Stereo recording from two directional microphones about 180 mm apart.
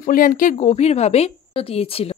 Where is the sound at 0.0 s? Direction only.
50° left (ahead or behind).